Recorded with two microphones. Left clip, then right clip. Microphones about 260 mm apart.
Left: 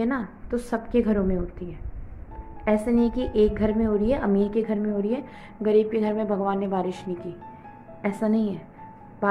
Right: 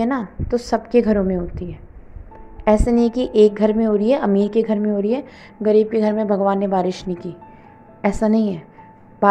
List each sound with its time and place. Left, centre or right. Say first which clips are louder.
0.0 s a woman's voice: right 6 dB; right